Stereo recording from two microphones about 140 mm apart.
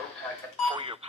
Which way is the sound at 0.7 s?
40° right (ahead or behind).